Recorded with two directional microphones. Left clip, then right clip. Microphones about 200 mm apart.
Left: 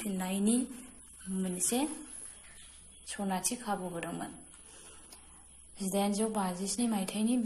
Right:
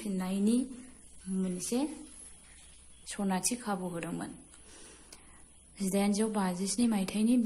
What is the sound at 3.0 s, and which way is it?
A woman's voice, 40° right (ahead or behind).